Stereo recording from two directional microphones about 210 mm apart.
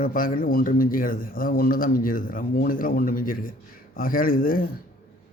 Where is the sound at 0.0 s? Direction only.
40° left (ahead or behind).